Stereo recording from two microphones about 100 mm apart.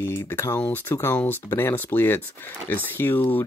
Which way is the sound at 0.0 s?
25° left (ahead or behind).